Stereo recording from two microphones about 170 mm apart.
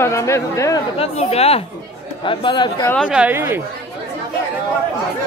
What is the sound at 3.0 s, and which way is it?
Speech, 5° right (ahead or behind).